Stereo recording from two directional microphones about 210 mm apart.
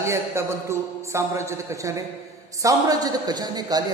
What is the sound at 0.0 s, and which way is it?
A man's voice, 15° right (ahead or behind).